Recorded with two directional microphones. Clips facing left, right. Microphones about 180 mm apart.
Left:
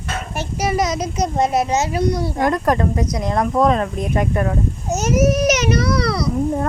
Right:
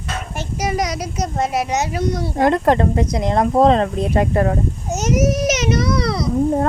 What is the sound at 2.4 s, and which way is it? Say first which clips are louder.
Speech: right 4 dB; 25° right (ahead or behind).